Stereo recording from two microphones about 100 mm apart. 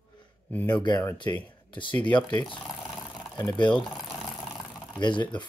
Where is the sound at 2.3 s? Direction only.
50° left (ahead or behind).